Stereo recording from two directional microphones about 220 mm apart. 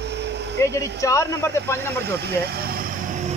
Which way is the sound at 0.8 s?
15° left (ahead or behind).